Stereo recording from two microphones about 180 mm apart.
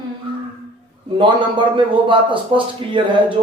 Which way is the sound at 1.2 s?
25° right (ahead or behind).